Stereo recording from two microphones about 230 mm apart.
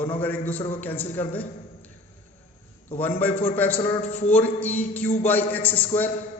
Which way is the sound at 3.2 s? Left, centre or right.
Centre.